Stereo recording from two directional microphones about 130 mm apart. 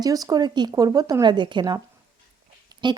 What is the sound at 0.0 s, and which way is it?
Speech, 30° right (ahead or behind).